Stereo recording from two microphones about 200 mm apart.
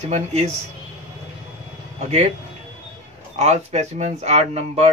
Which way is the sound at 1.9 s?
35° right (ahead or behind).